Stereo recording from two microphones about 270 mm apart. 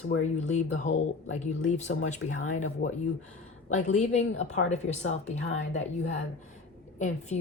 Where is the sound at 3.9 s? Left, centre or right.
Left.